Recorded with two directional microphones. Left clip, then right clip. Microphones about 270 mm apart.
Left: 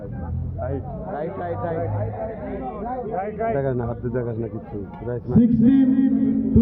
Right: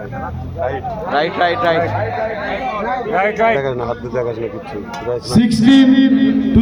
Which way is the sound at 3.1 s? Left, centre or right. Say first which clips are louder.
Right 12 dB; right.